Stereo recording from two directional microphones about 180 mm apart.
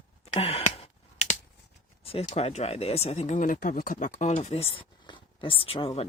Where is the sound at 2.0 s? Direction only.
35° left (ahead or behind).